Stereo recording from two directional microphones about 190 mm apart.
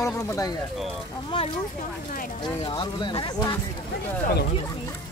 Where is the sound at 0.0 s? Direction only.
15° left (ahead or behind).